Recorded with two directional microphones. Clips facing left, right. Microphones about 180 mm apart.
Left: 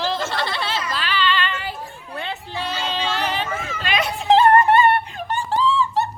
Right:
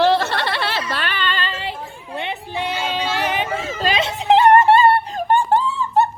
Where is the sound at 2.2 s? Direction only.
20° right (ahead or behind).